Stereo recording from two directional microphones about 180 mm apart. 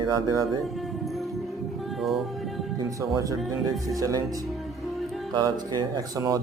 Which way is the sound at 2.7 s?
20° right (ahead or behind).